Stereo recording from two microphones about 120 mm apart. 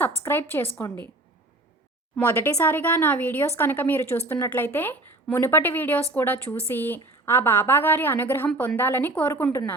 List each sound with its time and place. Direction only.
0.3 s a woman's voice: 15° left (ahead or behind)
2.2 s a woman's voice: 15° left (ahead or behind)
2.5 s a woman's voice: 25° left (ahead or behind)
2.7 s a woman's voice: 15° left (ahead or behind)